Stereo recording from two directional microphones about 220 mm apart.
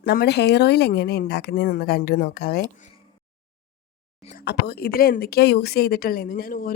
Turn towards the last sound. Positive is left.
turn(degrees=40)  # may be behind; listen again after turning